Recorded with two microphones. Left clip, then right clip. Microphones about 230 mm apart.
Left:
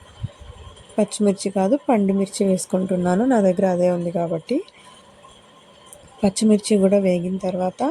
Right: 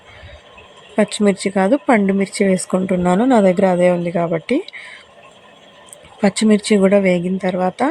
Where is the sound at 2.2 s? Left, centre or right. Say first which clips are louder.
Right 4 dB; centre.